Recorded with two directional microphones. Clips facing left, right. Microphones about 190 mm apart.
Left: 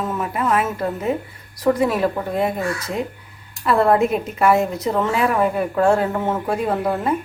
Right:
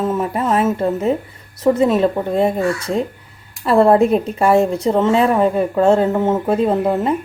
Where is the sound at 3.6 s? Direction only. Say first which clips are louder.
Right 4 dB; 30° right (ahead or behind).